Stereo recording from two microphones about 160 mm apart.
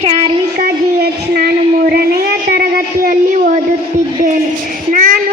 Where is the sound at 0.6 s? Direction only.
80° right.